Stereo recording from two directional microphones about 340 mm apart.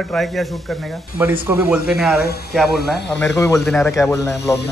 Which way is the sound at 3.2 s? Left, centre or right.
Centre.